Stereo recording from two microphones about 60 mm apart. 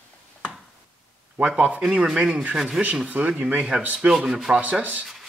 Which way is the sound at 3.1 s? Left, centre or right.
Right.